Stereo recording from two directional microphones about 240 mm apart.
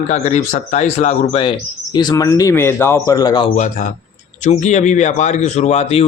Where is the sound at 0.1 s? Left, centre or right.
Left.